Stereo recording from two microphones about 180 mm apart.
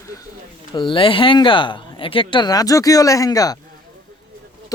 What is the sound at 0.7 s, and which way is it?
Speech, 30° left (ahead or behind).